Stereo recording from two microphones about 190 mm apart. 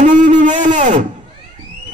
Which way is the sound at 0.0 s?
40° right (ahead or behind).